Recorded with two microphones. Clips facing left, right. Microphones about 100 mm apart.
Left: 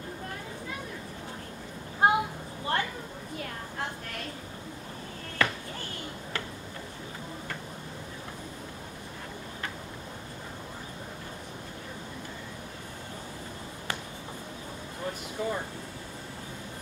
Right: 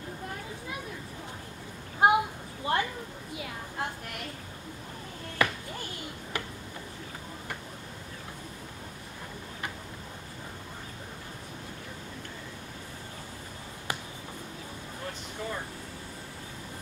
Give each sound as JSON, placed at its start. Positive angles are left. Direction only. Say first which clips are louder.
{"t": 2.0, "sound": "a sound", "louder": "right 1 dB", "side_deg": -20}
{"t": 5.4, "sound": "basketball bounce", "louder": "even", "side_deg": -15}
{"t": 15.4, "sound": "air conditioning", "louder": "left 5 dB", "side_deg": 10}